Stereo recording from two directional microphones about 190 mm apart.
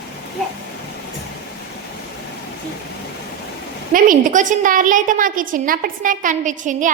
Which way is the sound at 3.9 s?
45° right (ahead or behind).